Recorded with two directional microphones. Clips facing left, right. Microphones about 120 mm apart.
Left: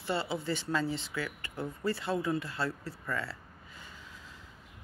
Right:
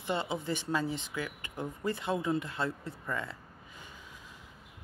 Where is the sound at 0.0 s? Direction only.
20° right (ahead or behind).